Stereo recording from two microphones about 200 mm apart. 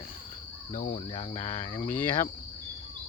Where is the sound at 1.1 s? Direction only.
25° left (ahead or behind).